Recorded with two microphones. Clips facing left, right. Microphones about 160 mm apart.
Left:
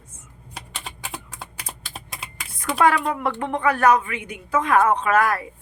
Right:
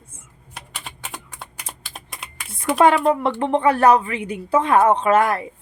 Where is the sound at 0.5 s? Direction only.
Centre (ahead or behind).